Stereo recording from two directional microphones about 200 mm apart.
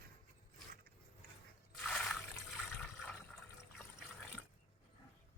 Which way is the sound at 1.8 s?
5° left (ahead or behind).